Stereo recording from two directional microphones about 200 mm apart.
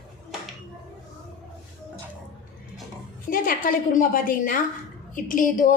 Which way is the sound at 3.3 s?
45° left (ahead or behind).